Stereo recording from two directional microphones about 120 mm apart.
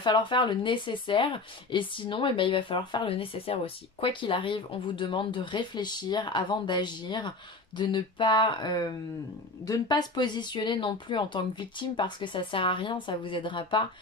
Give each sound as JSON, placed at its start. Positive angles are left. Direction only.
{"t": 0.0, "sound": "speech", "side_deg": 40}